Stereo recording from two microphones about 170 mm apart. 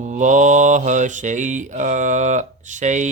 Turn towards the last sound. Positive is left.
turn(degrees=-45)  # may be behind; listen again after turning